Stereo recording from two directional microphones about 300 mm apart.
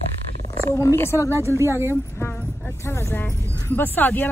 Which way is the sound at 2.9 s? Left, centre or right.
Centre.